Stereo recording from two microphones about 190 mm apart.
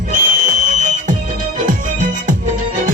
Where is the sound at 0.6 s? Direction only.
40° right (ahead or behind).